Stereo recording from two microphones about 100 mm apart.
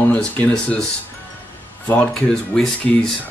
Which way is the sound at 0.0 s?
15° left (ahead or behind).